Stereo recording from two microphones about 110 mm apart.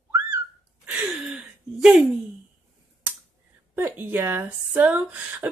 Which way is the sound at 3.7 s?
20° right (ahead or behind).